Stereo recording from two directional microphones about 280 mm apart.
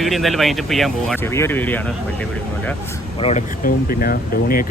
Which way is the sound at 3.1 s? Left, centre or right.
Left.